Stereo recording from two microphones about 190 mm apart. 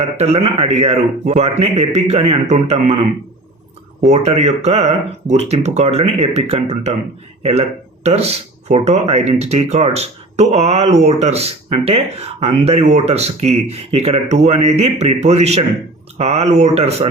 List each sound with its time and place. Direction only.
0.2 s a man's voice: 35° right (ahead or behind)
8.0 s a man's voice: 35° right (ahead or behind)